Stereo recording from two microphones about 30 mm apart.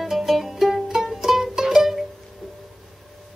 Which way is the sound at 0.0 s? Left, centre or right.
Centre.